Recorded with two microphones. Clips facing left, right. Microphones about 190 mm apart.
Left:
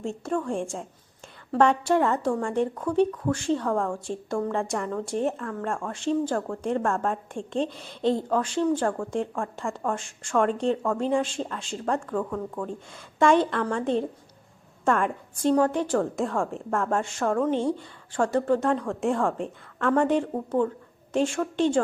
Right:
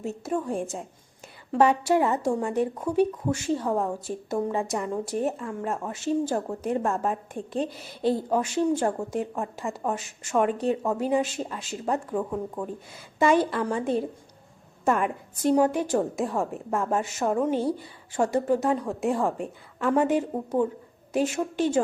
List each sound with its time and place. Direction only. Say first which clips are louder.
0.0 s a woman's voice: even; 5° right (ahead or behind)
3.9 s a woman's voice: even; 5° right (ahead or behind)
11.9 s a woman's voice: even; 15° right (ahead or behind)
12.6 s a woman's voice: even; 5° right (ahead or behind)